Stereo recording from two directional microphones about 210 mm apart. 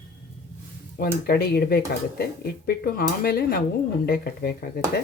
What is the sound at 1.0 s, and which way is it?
Speech, 45° left (ahead or behind).